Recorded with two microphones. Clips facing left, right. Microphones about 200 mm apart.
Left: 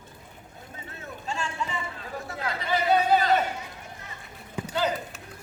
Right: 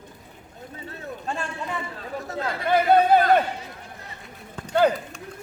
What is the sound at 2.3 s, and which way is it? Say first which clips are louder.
Chatter: right 7 dB; 55° right (ahead or behind).